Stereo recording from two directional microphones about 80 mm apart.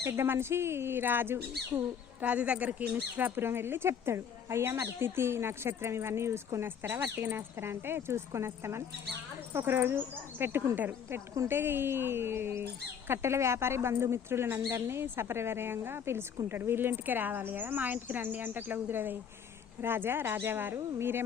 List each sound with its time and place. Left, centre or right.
0.0 s speech: right
2.2 s speech: centre